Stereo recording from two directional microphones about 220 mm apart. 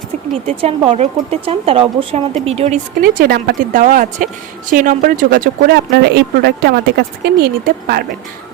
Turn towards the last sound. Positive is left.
turn(degrees=-45)  # may be behind; listen again after turning